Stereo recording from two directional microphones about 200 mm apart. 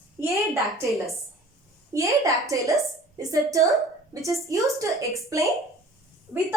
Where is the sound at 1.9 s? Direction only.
15° right (ahead or behind).